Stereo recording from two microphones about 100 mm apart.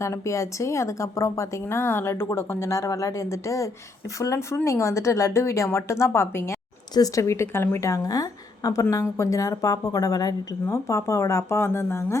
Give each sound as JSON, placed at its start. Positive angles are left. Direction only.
{"t": 0.0, "sound": "a woman's voice", "side_deg": 30}